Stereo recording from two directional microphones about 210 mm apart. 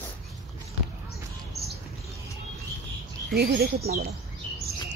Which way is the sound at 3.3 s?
50° right (ahead or behind).